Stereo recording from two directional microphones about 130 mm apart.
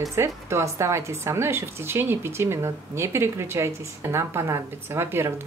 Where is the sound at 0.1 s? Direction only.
20° right (ahead or behind).